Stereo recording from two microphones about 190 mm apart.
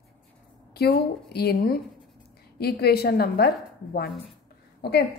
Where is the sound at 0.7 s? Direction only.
55° left (ahead or behind).